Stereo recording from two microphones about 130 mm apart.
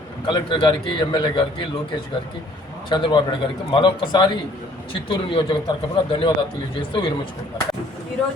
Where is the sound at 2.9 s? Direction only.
35° left (ahead or behind).